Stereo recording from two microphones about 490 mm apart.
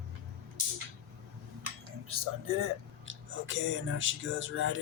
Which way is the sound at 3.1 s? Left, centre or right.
Right.